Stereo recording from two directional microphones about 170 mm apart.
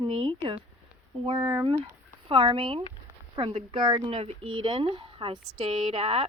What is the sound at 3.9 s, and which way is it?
Speech, 40° right (ahead or behind).